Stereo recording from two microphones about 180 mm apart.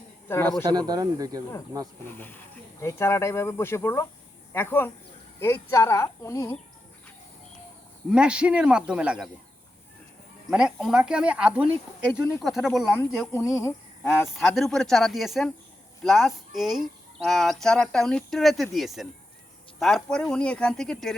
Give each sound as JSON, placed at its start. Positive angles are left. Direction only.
{"t": 0.3, "sound": "speech", "side_deg": 15}
{"t": 0.6, "sound": "speech", "side_deg": -25}
{"t": 2.1, "sound": "speech", "side_deg": 10}
{"t": 8.1, "sound": "speech", "side_deg": -5}
{"t": 10.5, "sound": "speech", "side_deg": -5}
{"t": 13.3, "sound": "speech", "side_deg": 15}
{"t": 14.3, "sound": "speech", "side_deg": 0}